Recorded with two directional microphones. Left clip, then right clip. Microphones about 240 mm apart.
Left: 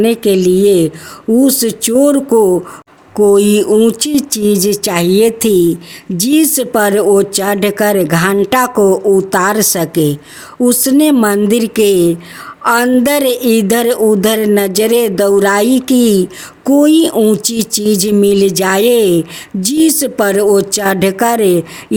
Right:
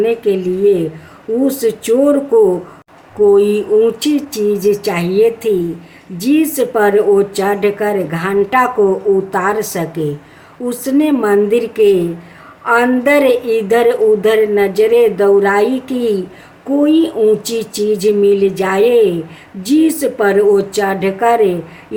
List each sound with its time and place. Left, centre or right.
0.0 s a woman's voice: left